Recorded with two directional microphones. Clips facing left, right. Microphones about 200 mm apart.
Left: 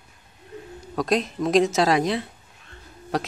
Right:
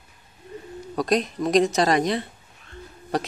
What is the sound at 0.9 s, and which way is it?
Speech, centre (ahead or behind).